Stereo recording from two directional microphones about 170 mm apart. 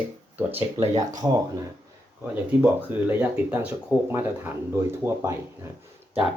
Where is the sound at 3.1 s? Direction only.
10° right (ahead or behind).